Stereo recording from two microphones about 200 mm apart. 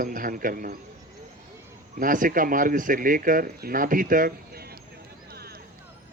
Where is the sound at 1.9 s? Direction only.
40° right (ahead or behind).